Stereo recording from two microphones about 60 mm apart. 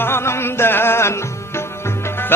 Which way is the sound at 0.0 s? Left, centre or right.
Left.